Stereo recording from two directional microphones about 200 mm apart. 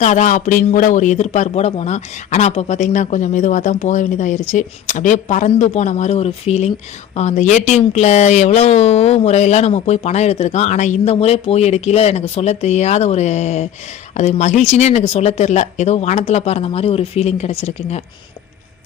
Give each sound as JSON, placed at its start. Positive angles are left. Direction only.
{"t": 0.0, "sound": "a man's voice", "side_deg": 35}